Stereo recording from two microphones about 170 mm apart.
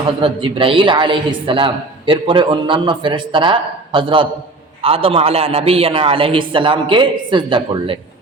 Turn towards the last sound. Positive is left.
turn(degrees=-30)  # may be behind; listen again after turning